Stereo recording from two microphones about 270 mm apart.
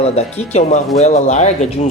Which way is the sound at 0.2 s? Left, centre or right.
Left.